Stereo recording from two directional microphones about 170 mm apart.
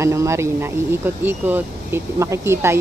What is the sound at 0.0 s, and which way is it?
A woman's voice, 15° right (ahead or behind).